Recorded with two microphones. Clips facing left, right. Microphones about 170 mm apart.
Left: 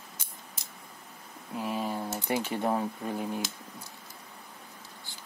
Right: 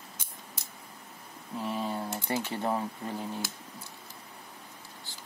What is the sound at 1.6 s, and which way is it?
Speech, 15° left (ahead or behind).